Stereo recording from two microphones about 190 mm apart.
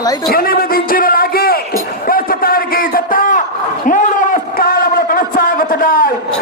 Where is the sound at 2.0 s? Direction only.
50° left (ahead or behind).